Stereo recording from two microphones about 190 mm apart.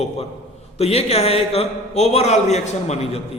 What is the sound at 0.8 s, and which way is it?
A man's voice, 35° left (ahead or behind).